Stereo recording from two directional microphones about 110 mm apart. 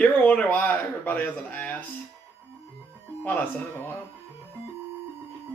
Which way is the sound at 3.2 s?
20° left (ahead or behind).